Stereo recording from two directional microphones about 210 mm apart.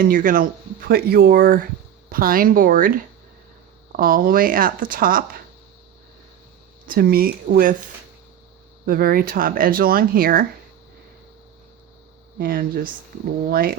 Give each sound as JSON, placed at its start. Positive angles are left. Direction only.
{"t": 0.0, "sound": "speech", "side_deg": -40}
{"t": 6.8, "sound": "speech", "side_deg": -45}
{"t": 8.9, "sound": "speech", "side_deg": -45}
{"t": 12.4, "sound": "speech", "side_deg": -45}